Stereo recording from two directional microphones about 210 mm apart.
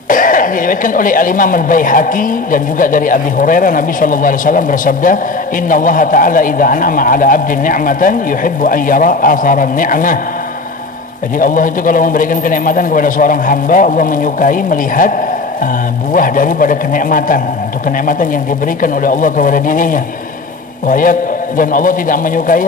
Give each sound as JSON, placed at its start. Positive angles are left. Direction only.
{"t": 0.1, "sound": "speech", "side_deg": 40}
{"t": 11.3, "sound": "speech", "side_deg": 40}
{"t": 16.1, "sound": "speech", "side_deg": 40}
{"t": 18.8, "sound": "speech", "side_deg": 40}